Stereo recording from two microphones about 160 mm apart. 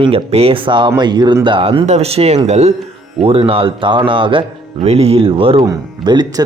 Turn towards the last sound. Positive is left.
turn(degrees=-25)  # may be behind; listen again after turning